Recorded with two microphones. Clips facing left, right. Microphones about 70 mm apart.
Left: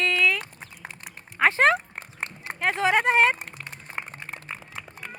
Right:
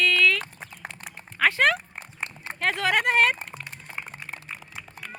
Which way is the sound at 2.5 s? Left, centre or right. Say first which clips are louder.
Left 2 dB; centre.